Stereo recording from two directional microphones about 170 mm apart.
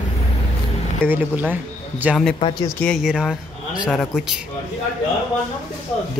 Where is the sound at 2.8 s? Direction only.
Centre (ahead or behind).